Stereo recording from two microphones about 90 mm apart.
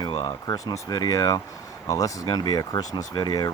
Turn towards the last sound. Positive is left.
turn(degrees=50)  # may be behind; listen again after turning